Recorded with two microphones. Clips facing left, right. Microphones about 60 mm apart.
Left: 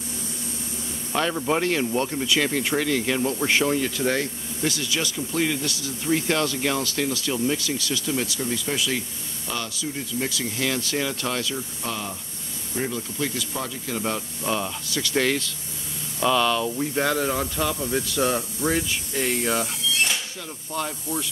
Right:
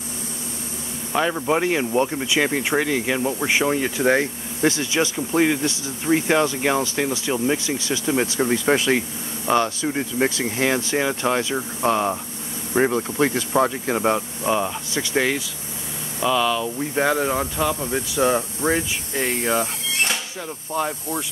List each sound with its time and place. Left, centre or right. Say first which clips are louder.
1.1 s speech: right 3 dB; centre; by 8.4 s right
8.4 s speech: right 8 dB; right
11.5 s speech: right 10 dB; right; by 15.2 s centre
16.2 s speech: right 1 dB; centre
16.9 s speech: right 5 dB; centre
17.7 s speech: right 2 dB; right
20.7 s speech: right 4 dB; centre